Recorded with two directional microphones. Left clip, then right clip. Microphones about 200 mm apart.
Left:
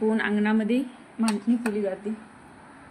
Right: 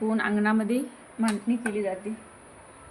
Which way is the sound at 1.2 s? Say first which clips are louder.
Left 2 dB; 25° left (ahead or behind).